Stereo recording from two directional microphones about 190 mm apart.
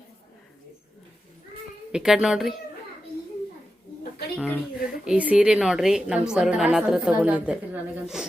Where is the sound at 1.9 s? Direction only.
5° right (ahead or behind).